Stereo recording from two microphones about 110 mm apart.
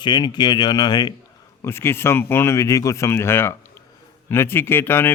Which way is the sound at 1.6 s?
20° left (ahead or behind).